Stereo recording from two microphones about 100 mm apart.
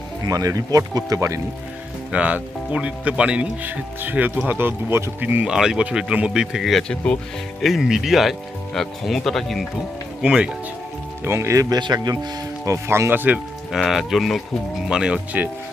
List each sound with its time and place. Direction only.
0.3 s speech: 40° right (ahead or behind)
2.1 s speech: 15° right (ahead or behind); by 7.2 s 10° left (ahead or behind)
7.6 s speech: centre (ahead or behind)
10.2 s speech: 10° right (ahead or behind)
11.3 s speech: 30° right (ahead or behind)
13.7 s speech: centre (ahead or behind)